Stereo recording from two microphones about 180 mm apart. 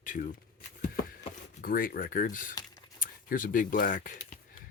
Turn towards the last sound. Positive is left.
turn(degrees=50)  # may be behind; listen again after turning